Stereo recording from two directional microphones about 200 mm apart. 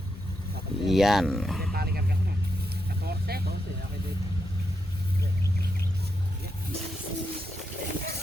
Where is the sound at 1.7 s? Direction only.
50° right (ahead or behind).